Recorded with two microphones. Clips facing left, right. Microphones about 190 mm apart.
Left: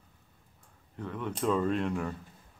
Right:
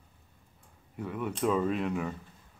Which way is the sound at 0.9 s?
10° right (ahead or behind).